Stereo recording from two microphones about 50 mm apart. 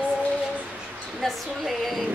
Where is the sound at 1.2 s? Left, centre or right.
Centre.